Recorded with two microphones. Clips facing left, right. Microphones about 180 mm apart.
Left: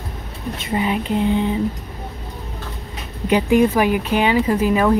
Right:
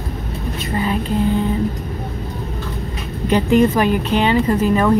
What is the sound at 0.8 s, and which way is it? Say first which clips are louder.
Speech: even; 15° left (ahead or behind).